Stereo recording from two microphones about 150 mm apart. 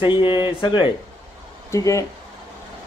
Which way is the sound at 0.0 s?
30° left (ahead or behind).